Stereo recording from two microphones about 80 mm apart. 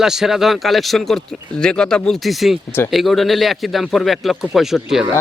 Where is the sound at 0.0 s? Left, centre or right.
Centre.